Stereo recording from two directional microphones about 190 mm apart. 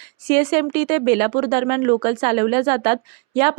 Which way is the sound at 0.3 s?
25° right (ahead or behind).